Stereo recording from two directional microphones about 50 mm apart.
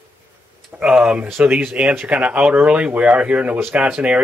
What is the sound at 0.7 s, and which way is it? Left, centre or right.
Speech, right.